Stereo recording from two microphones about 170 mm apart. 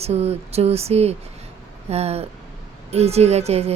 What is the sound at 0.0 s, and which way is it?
A woman's voice, 40° right (ahead or behind).